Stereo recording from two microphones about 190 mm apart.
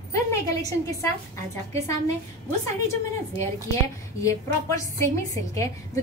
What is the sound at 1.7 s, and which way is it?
Speech, 15° left (ahead or behind).